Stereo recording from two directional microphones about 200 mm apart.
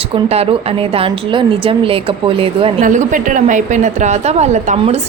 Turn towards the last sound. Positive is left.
turn(degrees=-35)  # may be behind; listen again after turning